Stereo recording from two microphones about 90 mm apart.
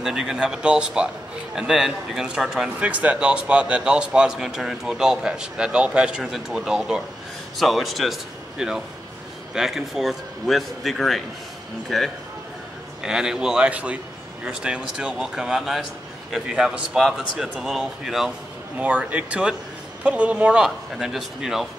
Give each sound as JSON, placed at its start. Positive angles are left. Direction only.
{"t": 0.0, "sound": "a man's voice", "side_deg": -5}
{"t": 2.8, "sound": "a man's voice", "side_deg": -15}
{"t": 18.8, "sound": "a man's voice", "side_deg": -15}